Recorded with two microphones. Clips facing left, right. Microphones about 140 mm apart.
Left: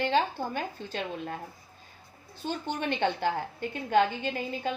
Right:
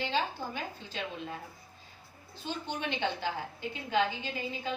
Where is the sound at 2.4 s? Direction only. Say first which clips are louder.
Left 4 dB; 50° left (ahead or behind).